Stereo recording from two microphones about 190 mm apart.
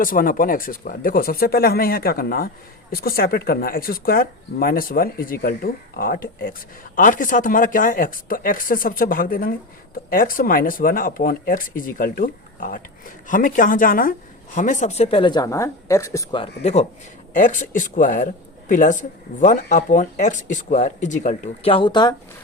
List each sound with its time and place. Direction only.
0.0 s speech: 45° left (ahead or behind); by 16.4 s 15° left (ahead or behind)
16.4 s speech: 35° left (ahead or behind)